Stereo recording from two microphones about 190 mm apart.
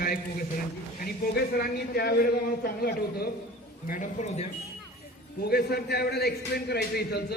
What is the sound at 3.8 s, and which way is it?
Speech, 45° left (ahead or behind).